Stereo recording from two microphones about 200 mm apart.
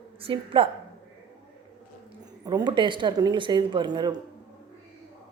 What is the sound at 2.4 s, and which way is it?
Speech, 20° right (ahead or behind).